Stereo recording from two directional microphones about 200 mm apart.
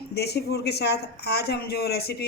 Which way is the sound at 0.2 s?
55° left (ahead or behind).